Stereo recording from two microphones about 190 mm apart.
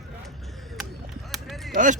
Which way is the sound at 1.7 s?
40° right (ahead or behind).